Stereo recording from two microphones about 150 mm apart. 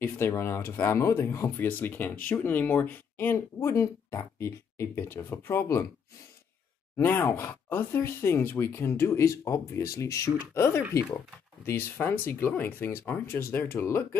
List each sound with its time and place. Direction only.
0.0 s speech: 15° left (ahead or behind)
7.0 s speech: 15° left (ahead or behind)